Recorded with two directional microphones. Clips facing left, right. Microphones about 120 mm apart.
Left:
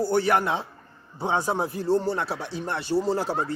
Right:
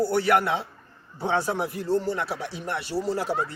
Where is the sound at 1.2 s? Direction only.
15° left (ahead or behind).